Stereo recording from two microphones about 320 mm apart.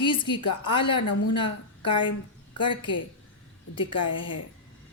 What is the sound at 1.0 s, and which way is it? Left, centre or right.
Speech, left.